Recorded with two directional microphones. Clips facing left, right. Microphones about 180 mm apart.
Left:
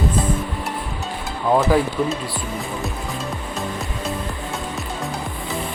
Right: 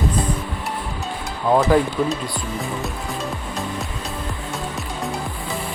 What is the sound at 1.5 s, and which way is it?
Speech, centre (ahead or behind).